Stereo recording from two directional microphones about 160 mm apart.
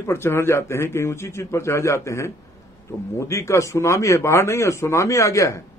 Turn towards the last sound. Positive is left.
turn(degrees=20)  # may be behind; listen again after turning